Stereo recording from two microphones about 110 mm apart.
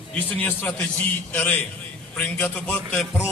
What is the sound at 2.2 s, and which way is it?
Speech, 15° left (ahead or behind).